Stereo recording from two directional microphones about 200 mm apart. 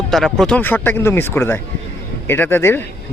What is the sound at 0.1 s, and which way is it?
Speech, centre (ahead or behind).